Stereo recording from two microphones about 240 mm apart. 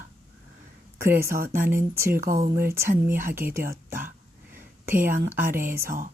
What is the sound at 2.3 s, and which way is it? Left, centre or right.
Speech, right.